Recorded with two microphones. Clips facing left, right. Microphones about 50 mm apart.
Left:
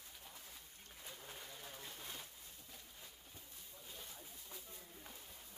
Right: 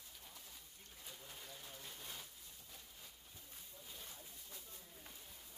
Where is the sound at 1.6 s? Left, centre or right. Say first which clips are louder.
Left 2 dB; left.